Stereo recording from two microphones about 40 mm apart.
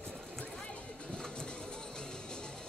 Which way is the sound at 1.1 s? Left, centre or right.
Centre.